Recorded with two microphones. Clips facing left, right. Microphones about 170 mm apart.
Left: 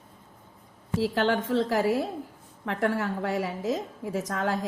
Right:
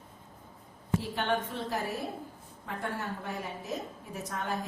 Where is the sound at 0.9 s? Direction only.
90° left.